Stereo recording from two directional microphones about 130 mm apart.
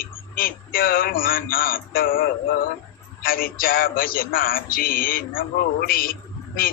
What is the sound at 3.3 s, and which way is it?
Speech, 90° left.